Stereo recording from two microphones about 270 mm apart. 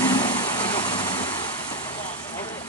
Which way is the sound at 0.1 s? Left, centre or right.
Centre.